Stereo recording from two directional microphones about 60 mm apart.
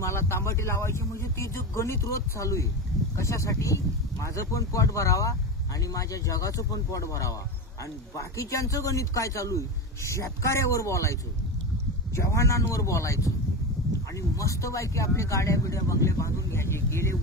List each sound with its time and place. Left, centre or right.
0.0 s a man's voice: left
12.2 s a man's voice: left
14.3 s a man's voice: left